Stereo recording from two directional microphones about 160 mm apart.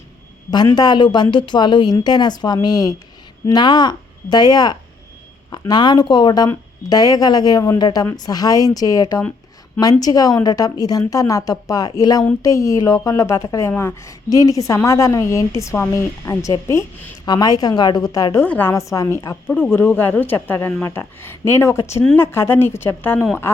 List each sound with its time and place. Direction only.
0.5 s a woman's voice: 25° left (ahead or behind)